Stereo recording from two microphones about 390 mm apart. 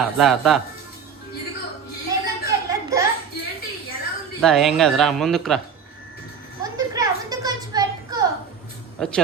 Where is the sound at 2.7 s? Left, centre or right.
Centre.